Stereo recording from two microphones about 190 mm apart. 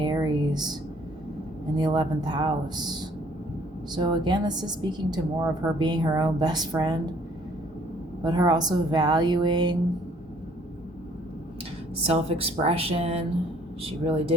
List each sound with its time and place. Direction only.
0.0 s a sound: 20° right (ahead or behind)
1.7 s a woman's voice: 25° right (ahead or behind)
8.2 s a woman's voice: 20° right (ahead or behind)
12.0 s a woman's voice: 30° right (ahead or behind)